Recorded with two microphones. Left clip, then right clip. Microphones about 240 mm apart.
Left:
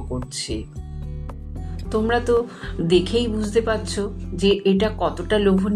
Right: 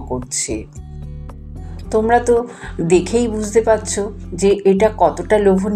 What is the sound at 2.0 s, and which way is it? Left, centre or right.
A woman's voice, centre.